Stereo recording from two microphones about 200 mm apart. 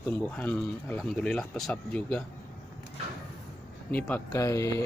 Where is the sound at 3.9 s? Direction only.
10° left (ahead or behind).